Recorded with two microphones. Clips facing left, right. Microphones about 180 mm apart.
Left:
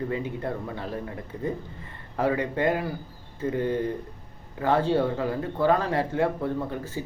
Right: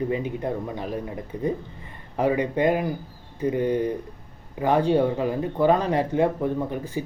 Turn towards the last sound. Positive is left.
turn(degrees=-15)  # may be behind; listen again after turning